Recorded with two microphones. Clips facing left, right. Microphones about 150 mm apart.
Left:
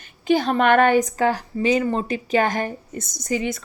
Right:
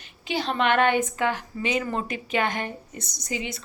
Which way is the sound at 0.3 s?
50° left (ahead or behind).